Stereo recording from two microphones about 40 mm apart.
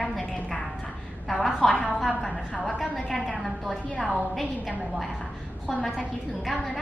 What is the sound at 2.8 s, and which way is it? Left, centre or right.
Speech, centre.